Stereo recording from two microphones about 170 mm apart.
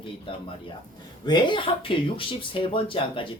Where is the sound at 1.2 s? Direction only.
25° left (ahead or behind).